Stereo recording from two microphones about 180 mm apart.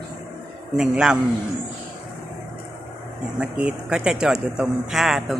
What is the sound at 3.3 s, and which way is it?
Speech, 5° right (ahead or behind).